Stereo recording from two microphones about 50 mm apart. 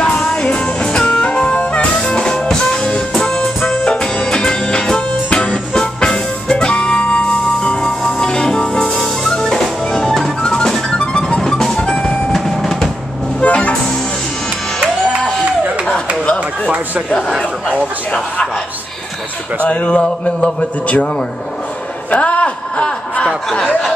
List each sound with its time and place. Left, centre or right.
0.0 s music: left
11.8 s music: centre
12.3 s train: centre
13.4 s music: left
19.6 s a man's voice: left
22.1 s a sound: left